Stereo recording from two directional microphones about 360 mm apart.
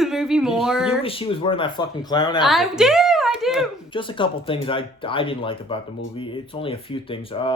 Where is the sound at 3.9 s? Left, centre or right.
Centre.